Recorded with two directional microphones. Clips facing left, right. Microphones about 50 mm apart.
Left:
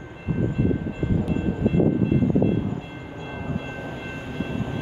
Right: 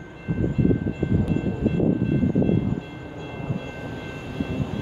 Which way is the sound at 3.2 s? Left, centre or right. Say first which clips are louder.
Left 1 dB; left.